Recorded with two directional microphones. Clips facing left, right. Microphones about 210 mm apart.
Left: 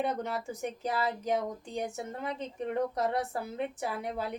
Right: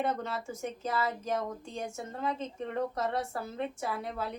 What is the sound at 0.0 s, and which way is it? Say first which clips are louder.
A woman's voice: left 1 dB; 15° left (ahead or behind).